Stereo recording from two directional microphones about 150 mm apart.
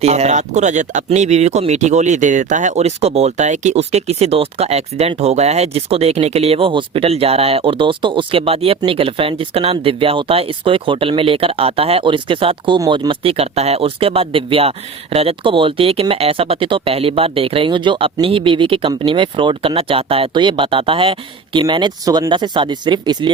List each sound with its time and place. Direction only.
0.0 s speech: 45° right (ahead or behind); by 23.3 s 30° right (ahead or behind)